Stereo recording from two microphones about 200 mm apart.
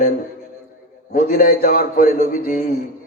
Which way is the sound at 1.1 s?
45° left (ahead or behind).